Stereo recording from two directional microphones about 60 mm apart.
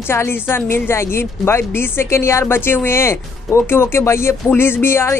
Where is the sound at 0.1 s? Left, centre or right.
Left.